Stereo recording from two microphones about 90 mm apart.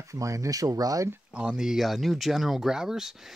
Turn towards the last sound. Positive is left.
turn(degrees=-5)  # may be behind; listen again after turning